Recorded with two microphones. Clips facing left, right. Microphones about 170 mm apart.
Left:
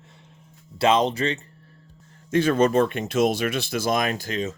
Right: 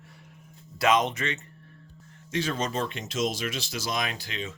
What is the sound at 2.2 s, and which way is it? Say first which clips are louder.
Speech: left 10 dB; 55° left (ahead or behind).